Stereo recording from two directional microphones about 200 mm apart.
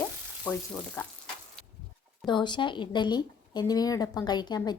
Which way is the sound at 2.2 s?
20° left (ahead or behind).